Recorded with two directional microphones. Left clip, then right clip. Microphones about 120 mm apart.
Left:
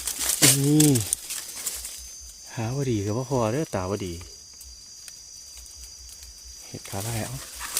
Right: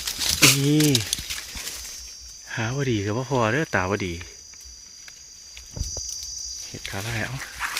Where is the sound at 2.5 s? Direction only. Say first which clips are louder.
Right 3 dB; 15° left (ahead or behind).